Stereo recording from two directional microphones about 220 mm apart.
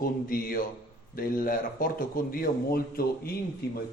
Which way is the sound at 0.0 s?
40° left (ahead or behind).